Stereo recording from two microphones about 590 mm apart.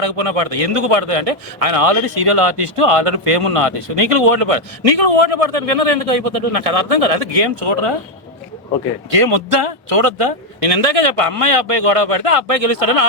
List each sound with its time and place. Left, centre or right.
0.0 s speech: right
9.0 s speech: right